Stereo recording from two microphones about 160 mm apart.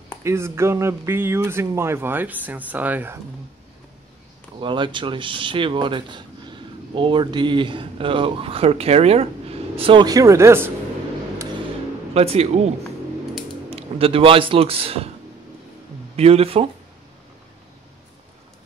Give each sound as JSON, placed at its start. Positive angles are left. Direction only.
{"t": 0.2, "sound": "speech", "side_deg": -15}
{"t": 4.6, "sound": "speech", "side_deg": -30}
{"t": 12.1, "sound": "speech", "side_deg": -40}
{"t": 13.7, "sound": "a man's voice", "side_deg": -35}
{"t": 16.2, "sound": "speech", "side_deg": -40}